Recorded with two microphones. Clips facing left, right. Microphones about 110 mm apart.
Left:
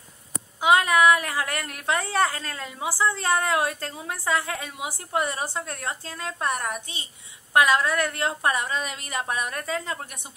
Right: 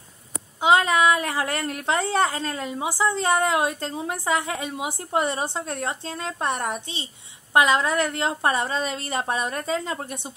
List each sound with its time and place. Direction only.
0.6 s a woman's voice: 25° right (ahead or behind)